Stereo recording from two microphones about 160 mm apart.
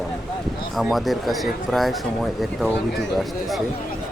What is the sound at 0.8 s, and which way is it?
Speech, centre (ahead or behind).